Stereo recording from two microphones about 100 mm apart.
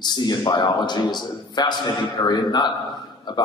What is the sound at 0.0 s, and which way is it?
A man's voice, 45° left (ahead or behind).